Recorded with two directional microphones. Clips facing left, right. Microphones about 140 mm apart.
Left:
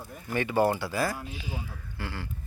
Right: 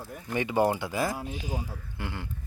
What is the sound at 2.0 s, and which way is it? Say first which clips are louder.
Speech: even; 20° right (ahead or behind).